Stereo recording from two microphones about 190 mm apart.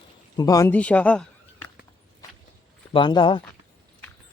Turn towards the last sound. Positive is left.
turn(degrees=25)  # may be behind; listen again after turning